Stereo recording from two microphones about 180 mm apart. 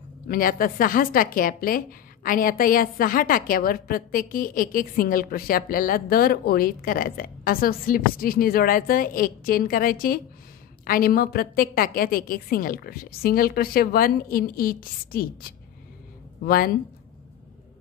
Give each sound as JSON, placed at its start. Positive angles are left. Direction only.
{"t": 0.3, "sound": "a woman's voice", "side_deg": 50}